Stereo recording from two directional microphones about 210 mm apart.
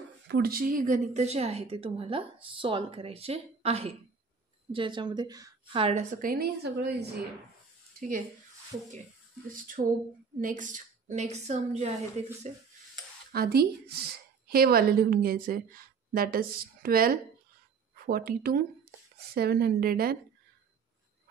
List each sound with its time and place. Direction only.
0.3 s a woman's voice: 45° right (ahead or behind)
9.5 s a woman's voice: 40° right (ahead or behind)
13.3 s a woman's voice: 50° right (ahead or behind)